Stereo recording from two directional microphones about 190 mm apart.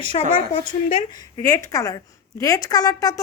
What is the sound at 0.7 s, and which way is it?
Speech, 40° left (ahead or behind).